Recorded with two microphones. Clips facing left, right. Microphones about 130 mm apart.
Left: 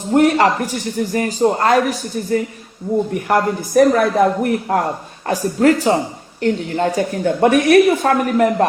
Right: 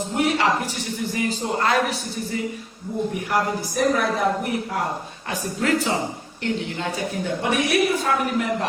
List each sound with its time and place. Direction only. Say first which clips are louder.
0.1 s speech: left 9 dB; 55° left (ahead or behind)
3.2 s speech: left 6 dB; 55° left (ahead or behind)
5.3 s speech: left 9 dB; 40° left (ahead or behind)